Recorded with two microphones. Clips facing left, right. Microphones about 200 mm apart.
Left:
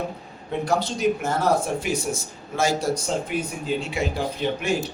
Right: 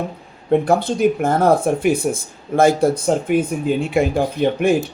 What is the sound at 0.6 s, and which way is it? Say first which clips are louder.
Speech: right 6 dB; 55° right (ahead or behind).